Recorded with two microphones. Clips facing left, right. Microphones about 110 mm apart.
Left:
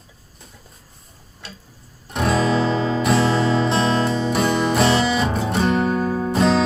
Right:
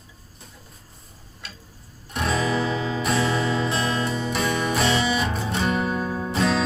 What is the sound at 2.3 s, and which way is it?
Music, 30° left (ahead or behind).